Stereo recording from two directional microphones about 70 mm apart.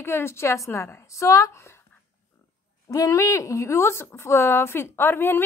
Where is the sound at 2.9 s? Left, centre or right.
Left.